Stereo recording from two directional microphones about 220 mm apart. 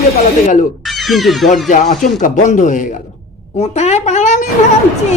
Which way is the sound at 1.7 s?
35° left (ahead or behind).